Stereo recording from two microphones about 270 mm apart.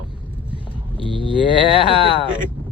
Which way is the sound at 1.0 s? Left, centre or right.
Centre.